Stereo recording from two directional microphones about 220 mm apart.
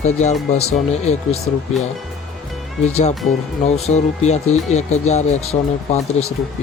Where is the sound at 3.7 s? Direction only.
30° left (ahead or behind).